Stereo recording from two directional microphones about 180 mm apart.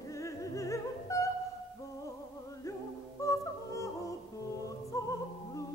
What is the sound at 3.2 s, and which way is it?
Music, 15° left (ahead or behind).